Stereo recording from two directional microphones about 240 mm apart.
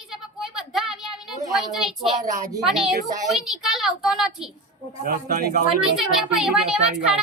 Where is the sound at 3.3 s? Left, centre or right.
Centre.